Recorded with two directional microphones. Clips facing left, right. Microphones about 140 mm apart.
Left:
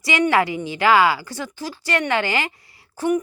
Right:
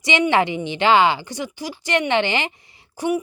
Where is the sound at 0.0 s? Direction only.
20° right (ahead or behind).